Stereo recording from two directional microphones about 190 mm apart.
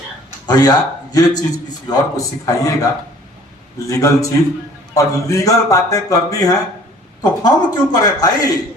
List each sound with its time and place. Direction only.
0.4 s a man's voice: 20° left (ahead or behind)
3.8 s a man's voice: 15° left (ahead or behind)